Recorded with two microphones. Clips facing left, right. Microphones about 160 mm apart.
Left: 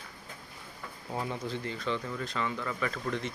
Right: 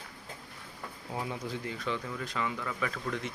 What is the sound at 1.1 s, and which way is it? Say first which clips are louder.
Speech: left 2 dB; 5° right (ahead or behind).